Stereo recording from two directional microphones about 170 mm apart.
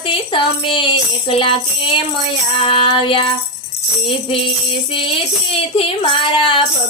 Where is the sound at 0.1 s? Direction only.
30° left (ahead or behind).